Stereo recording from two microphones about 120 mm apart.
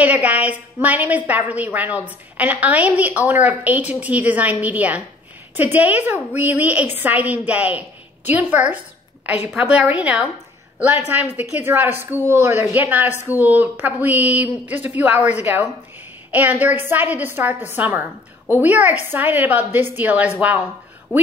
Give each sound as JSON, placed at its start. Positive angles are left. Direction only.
{"t": 0.0, "sound": "a woman's voice", "side_deg": -10}
{"t": 21.1, "sound": "speech", "side_deg": 20}